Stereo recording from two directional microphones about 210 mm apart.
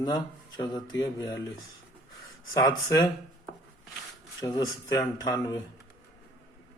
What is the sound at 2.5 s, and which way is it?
Speech, 20° left (ahead or behind).